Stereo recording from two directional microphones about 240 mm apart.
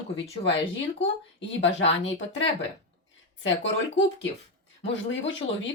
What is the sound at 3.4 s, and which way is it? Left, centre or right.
Speech, left.